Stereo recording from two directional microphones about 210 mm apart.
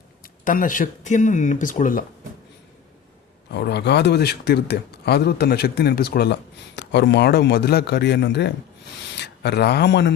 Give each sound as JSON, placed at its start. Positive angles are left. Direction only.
{"t": 0.2, "sound": "speech", "side_deg": 40}
{"t": 3.5, "sound": "speech", "side_deg": 50}